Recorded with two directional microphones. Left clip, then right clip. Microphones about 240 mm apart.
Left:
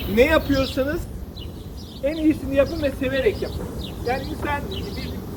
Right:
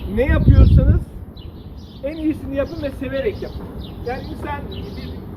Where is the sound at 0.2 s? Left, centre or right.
Centre.